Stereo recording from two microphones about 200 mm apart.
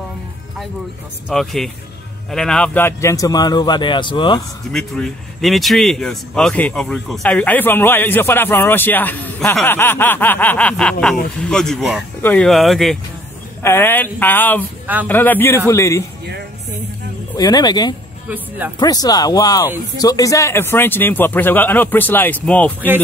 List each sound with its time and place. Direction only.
1.3 s a man's voice: centre (ahead or behind); by 4.4 s 25° left (ahead or behind)
4.7 s a man's voice: centre (ahead or behind)
13.6 s a man's voice: 10° left (ahead or behind)
17.4 s a man's voice: 20° left (ahead or behind)